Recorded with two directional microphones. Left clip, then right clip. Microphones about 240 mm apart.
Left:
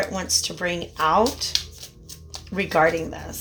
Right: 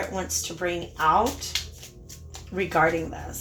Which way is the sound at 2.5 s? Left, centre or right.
Left.